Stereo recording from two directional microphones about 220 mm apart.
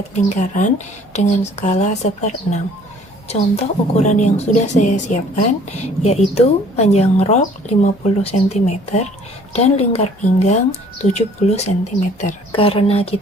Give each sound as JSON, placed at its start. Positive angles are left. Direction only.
{"t": 0.1, "sound": "a woman's voice", "side_deg": 30}